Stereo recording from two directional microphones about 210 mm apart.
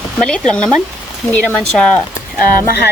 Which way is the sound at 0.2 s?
5° left (ahead or behind).